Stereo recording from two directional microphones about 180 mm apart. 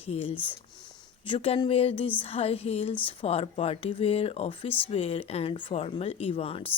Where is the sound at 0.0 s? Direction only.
30° left (ahead or behind).